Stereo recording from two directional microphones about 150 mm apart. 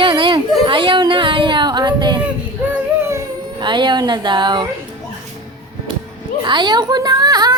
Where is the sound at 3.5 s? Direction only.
30° right (ahead or behind).